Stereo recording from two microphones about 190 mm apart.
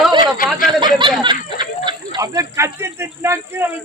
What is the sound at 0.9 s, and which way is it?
Speech, 25° right (ahead or behind).